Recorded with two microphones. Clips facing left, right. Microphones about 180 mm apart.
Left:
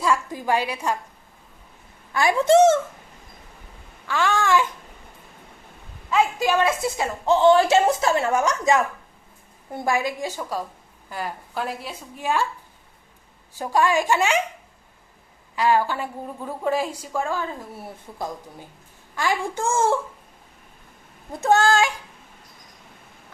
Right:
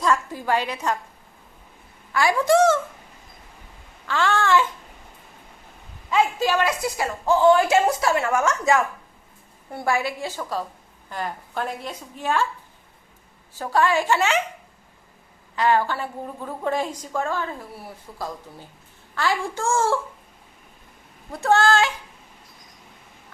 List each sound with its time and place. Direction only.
0.0 s a woman's voice: 10° left (ahead or behind)
2.1 s a woman's voice: 20° left (ahead or behind)
4.1 s a woman's voice: 15° left (ahead or behind)
6.6 s a woman's voice: 25° left (ahead or behind)
13.5 s a woman's voice: 15° left (ahead or behind)
15.5 s a woman's voice: 10° left (ahead or behind)
19.1 s a woman's voice: 20° left (ahead or behind)
21.3 s a woman's voice: 20° left (ahead or behind)